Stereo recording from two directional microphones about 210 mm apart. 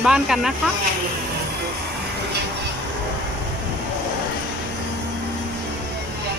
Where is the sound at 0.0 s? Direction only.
5° right (ahead or behind).